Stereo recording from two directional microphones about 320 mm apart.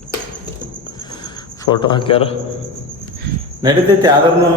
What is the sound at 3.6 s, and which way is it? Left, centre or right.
Speech, centre.